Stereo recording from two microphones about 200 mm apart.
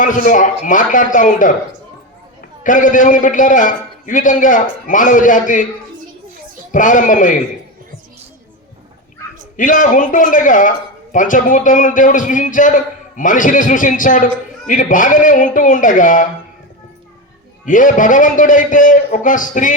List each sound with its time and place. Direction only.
0.0 s a man's voice: 40° left (ahead or behind)
2.6 s a man's voice: 40° left (ahead or behind)
6.7 s a man's voice: 40° left (ahead or behind)
9.6 s a man's voice: 40° left (ahead or behind)
17.7 s a man's voice: 40° left (ahead or behind)